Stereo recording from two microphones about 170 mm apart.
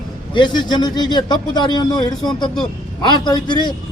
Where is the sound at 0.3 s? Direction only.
25° left (ahead or behind).